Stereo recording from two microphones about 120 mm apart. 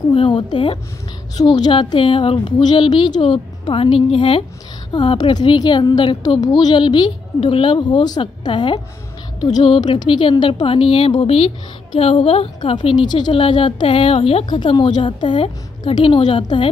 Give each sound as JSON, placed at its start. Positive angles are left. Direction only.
{"t": 0.1, "sound": "a woman's voice", "side_deg": 40}